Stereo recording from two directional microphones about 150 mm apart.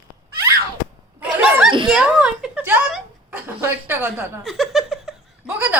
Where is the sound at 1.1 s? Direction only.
5° right (ahead or behind).